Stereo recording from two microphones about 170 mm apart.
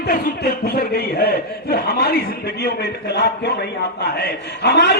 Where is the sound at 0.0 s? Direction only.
60° left (ahead or behind).